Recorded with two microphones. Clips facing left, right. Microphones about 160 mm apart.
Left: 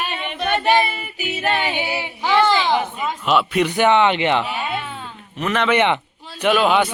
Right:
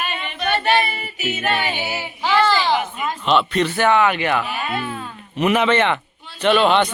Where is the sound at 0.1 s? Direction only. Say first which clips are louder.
Left 1 dB; 20° left (ahead or behind).